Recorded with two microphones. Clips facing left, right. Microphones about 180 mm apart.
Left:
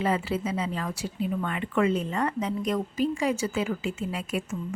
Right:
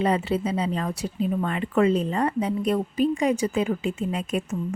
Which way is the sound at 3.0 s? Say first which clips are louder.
Right 4 dB; 15° right (ahead or behind).